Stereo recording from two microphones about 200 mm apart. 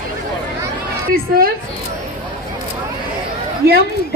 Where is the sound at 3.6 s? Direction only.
50° right (ahead or behind).